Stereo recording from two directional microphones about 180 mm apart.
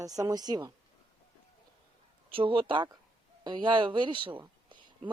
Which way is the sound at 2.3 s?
30° right (ahead or behind).